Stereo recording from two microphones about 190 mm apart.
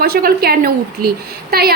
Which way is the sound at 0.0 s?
55° right (ahead or behind).